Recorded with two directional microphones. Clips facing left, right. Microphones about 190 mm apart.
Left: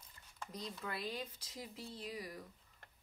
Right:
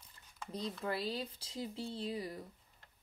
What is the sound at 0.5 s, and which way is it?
Speech, 30° right (ahead or behind).